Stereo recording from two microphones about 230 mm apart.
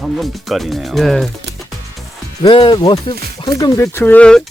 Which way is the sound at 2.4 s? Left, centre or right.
Centre.